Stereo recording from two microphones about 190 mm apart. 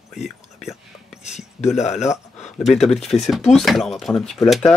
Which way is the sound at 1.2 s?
35° left (ahead or behind).